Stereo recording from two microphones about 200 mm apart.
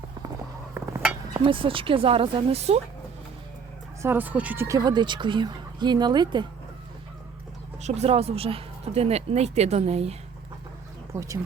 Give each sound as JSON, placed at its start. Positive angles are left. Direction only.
{"t": 1.3, "sound": "speech", "side_deg": -25}
{"t": 4.0, "sound": "speech", "side_deg": -10}
{"t": 7.8, "sound": "speech", "side_deg": -35}
{"t": 11.1, "sound": "speech", "side_deg": -15}